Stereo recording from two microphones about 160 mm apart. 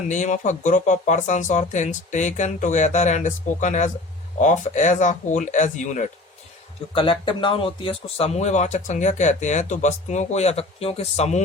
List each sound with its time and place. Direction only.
0.1 s speech: 50° left (ahead or behind)
6.9 s speech: 30° left (ahead or behind)